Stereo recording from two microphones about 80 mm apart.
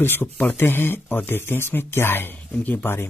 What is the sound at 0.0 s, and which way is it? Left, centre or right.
Speech, left.